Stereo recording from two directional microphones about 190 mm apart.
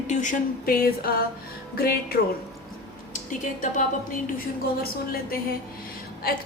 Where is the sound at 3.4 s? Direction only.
40° left (ahead or behind).